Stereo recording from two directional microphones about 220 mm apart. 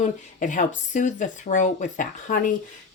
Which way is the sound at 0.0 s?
35° left (ahead or behind).